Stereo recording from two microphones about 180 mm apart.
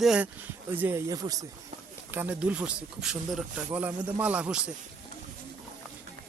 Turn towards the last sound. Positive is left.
turn(degrees=-5)  # may be behind; listen again after turning